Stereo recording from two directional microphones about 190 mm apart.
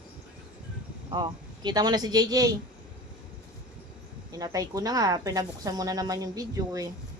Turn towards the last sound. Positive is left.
turn(degrees=-20)  # may be behind; listen again after turning